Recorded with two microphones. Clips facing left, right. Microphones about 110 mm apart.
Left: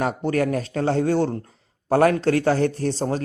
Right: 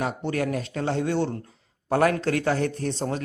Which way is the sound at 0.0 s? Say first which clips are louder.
Left 5 dB; 45° left (ahead or behind).